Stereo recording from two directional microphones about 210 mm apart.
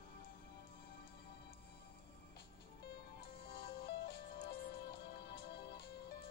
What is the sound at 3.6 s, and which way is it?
Music, 50° left (ahead or behind).